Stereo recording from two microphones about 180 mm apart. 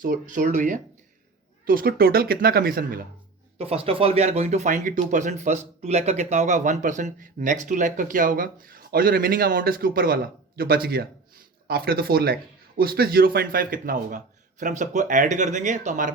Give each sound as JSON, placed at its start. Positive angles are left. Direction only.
{"t": 0.0, "sound": "speech", "side_deg": -50}
{"t": 3.6, "sound": "speech", "side_deg": -35}